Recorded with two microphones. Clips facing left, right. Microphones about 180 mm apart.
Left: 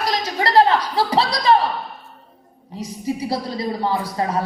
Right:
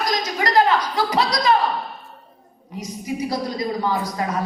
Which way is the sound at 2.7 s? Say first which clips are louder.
Left 3 dB; 30° left (ahead or behind).